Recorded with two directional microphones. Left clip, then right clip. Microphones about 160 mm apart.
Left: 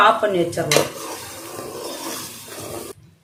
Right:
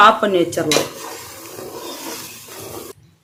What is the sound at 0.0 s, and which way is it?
Cutlery, 80° right.